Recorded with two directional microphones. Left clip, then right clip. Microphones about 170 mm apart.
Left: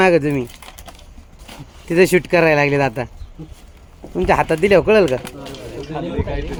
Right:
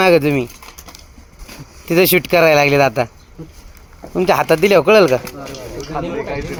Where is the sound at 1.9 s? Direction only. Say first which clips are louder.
Right 1 dB; 5° right (ahead or behind).